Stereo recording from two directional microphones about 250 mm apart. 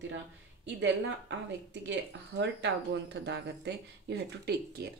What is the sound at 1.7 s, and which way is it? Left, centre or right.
Speech, right.